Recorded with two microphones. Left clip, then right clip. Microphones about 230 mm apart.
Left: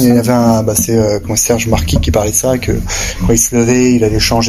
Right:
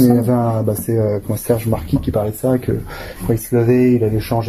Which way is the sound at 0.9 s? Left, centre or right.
Left.